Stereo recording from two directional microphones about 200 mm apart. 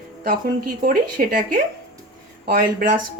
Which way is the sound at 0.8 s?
45° right (ahead or behind).